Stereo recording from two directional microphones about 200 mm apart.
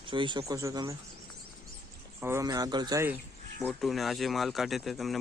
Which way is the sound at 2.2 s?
15° right (ahead or behind).